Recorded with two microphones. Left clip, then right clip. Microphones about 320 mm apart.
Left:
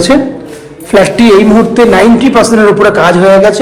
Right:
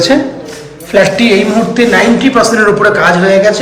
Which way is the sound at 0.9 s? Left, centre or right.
Centre.